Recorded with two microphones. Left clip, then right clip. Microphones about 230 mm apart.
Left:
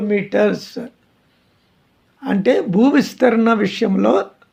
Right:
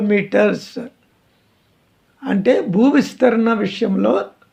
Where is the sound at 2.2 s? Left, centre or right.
Centre.